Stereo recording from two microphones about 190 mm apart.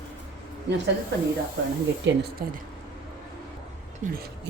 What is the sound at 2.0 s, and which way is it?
Speech, 70° right (ahead or behind).